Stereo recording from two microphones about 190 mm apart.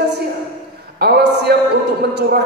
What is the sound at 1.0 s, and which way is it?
Speech, 60° right (ahead or behind).